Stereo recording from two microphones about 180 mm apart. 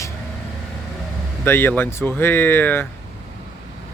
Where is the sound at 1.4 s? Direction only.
10° left (ahead or behind).